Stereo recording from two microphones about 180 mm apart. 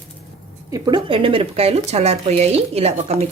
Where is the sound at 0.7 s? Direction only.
20° right (ahead or behind).